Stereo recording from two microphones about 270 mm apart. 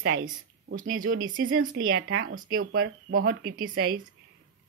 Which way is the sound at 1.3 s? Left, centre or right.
Right.